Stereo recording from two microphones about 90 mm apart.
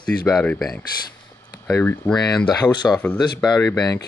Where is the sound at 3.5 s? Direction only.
30° left (ahead or behind).